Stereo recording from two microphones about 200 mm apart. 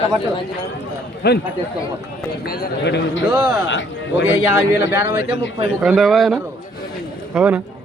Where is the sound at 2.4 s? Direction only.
50° left (ahead or behind); by 4.4 s 70° left (ahead or behind).